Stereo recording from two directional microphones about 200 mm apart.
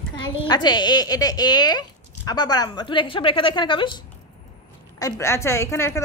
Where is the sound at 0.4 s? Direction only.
20° left (ahead or behind).